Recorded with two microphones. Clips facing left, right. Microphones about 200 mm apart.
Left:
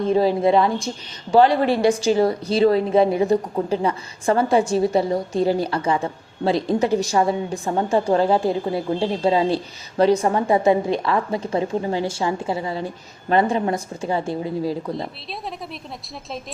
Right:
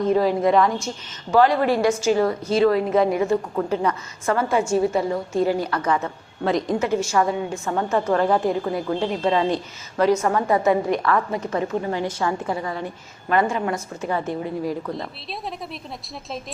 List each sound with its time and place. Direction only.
0.1 s a woman's voice: 30° left (ahead or behind)
9.0 s a woman's voice: 30° left (ahead or behind)
15.3 s a woman's voice: centre (ahead or behind)